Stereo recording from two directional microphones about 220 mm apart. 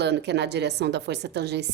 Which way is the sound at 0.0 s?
50° right (ahead or behind).